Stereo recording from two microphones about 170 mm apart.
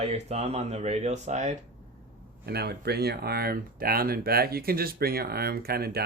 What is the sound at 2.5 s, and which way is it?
Speech, 70° right (ahead or behind).